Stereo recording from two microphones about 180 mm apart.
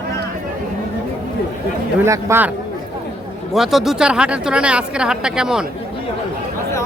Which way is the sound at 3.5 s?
Centre (ahead or behind).